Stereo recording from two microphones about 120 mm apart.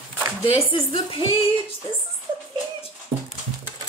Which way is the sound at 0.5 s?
50° left (ahead or behind).